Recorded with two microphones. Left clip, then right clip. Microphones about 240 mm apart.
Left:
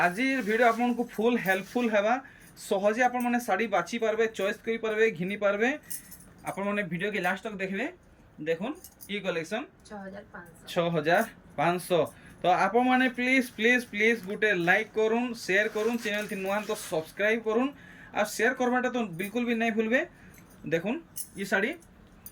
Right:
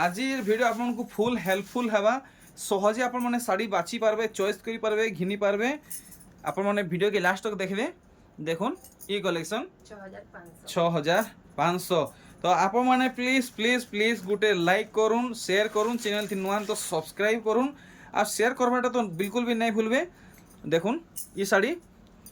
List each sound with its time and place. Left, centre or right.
0.0 s speech: centre
10.7 s speech: centre
19.8 s speech: right
20.7 s speech: centre